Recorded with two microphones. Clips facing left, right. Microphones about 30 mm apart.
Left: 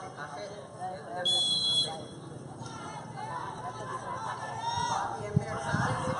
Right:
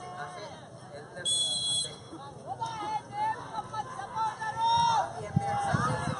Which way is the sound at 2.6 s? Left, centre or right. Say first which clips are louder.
Right 9 dB; right.